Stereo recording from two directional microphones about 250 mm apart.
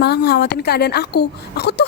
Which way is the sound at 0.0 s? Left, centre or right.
Left.